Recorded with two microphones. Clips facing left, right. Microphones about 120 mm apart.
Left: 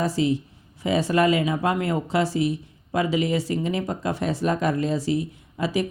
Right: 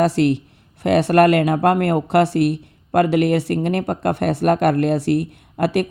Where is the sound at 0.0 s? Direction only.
70° right (ahead or behind).